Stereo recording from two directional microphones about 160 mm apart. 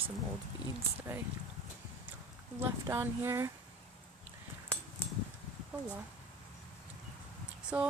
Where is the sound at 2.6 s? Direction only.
15° right (ahead or behind).